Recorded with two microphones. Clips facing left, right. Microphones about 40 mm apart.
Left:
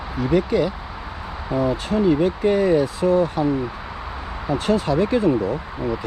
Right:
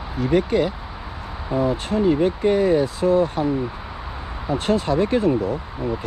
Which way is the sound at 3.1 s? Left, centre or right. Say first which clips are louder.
Even; right.